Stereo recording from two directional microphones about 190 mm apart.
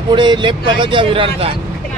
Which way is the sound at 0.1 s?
25° right (ahead or behind).